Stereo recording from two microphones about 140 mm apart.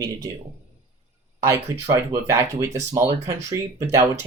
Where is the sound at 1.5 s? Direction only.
20° right (ahead or behind).